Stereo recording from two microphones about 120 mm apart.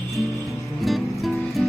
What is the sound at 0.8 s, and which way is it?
Music, centre (ahead or behind).